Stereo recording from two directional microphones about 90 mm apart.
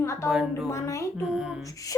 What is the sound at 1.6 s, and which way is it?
Speech, 40° left (ahead or behind).